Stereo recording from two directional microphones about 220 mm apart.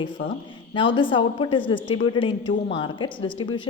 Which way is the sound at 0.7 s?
20° left (ahead or behind).